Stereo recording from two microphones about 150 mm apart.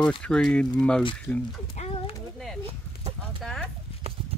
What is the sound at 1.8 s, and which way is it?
Speech, 50° left (ahead or behind).